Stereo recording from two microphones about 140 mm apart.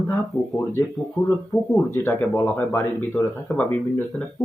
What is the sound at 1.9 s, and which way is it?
Speech, 15° left (ahead or behind).